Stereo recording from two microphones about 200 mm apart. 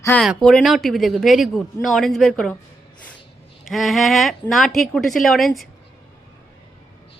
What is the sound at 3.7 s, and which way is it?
Speech, centre (ahead or behind).